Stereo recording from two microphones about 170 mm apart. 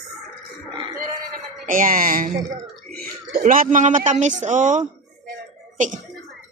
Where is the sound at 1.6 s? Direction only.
55° right (ahead or behind).